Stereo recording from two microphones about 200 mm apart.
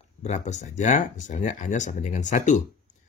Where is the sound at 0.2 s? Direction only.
35° left (ahead or behind).